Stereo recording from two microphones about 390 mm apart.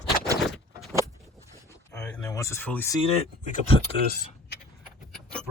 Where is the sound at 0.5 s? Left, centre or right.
Centre.